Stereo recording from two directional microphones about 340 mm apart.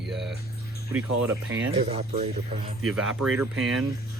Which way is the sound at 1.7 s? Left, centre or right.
Centre.